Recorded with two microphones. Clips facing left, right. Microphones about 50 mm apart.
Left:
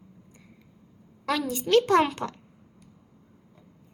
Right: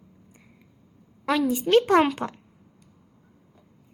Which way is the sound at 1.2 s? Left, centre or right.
Centre.